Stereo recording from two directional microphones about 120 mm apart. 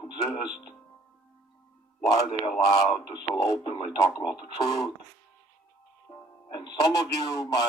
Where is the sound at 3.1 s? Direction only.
40° left (ahead or behind).